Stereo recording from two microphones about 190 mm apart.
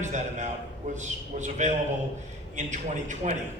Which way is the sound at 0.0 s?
40° right (ahead or behind).